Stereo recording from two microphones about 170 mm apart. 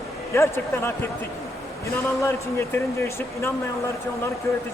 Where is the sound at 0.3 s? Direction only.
15° left (ahead or behind).